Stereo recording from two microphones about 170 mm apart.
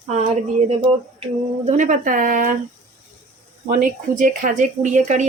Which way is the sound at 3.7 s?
55° right (ahead or behind).